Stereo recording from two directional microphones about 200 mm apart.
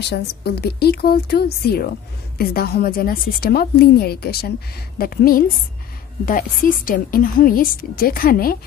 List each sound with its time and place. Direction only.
0.1 s a woman's voice: 55° left (ahead or behind)